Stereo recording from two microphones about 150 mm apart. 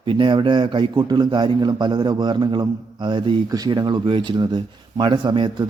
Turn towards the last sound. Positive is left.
turn(degrees=-30)  # may be behind; listen again after turning